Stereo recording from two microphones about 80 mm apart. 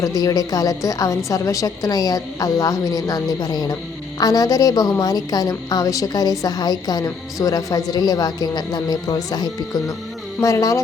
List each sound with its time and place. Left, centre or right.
0.0 s a woman's voice: left
10.4 s speech: left